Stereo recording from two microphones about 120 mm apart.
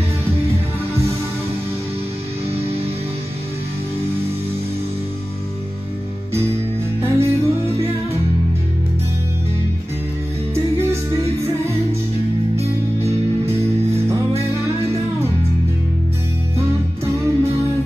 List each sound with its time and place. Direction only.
7.0 s music: 20° right (ahead or behind)
10.5 s music: 25° right (ahead or behind)
13.6 s music: 25° right (ahead or behind)
16.5 s music: 20° right (ahead or behind)